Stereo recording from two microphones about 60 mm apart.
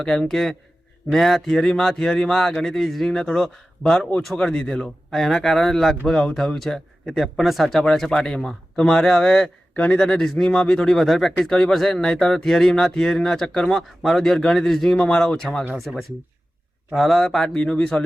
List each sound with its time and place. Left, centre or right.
0.0 s speech: centre
9.7 s speech: left
10.0 s speech: centre